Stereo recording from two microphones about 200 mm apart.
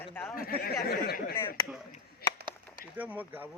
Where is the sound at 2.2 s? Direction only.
50° left (ahead or behind).